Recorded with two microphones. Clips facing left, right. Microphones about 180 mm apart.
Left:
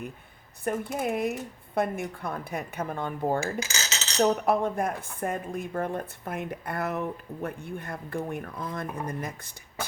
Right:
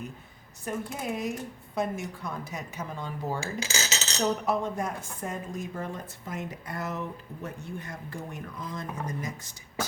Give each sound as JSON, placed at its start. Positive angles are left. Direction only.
{"t": 0.6, "sound": "a woman's voice", "side_deg": 55}
{"t": 3.4, "sound": "cutlery", "side_deg": -30}
{"t": 4.2, "sound": "a woman's voice", "side_deg": 55}